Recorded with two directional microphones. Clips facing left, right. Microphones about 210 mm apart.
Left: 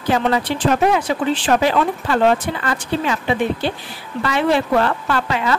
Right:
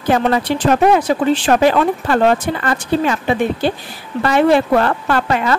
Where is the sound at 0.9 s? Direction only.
40° right (ahead or behind).